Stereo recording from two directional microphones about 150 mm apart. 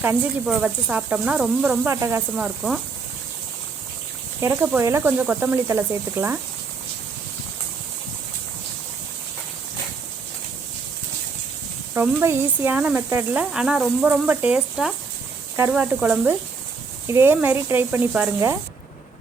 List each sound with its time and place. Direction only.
0.0 s speech: 15° right (ahead or behind)
2.3 s speech: 5° right (ahead or behind)
4.4 s speech: 15° right (ahead or behind)
11.9 s speech: 15° right (ahead or behind)